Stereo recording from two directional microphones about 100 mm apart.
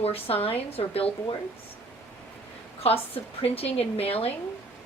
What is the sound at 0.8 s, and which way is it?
Speech, 60° left (ahead or behind).